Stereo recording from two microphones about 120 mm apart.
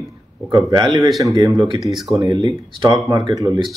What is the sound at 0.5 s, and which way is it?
Speech, 35° right (ahead or behind).